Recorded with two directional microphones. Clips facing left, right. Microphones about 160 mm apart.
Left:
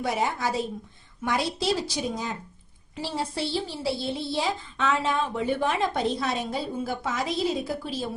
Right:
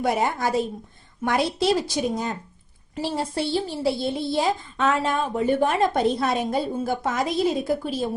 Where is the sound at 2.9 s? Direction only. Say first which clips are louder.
Right 4 dB; 50° right (ahead or behind).